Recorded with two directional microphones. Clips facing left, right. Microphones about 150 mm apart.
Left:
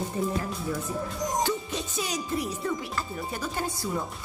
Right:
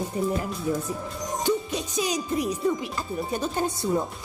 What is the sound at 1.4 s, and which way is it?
Music, 15° right (ahead or behind).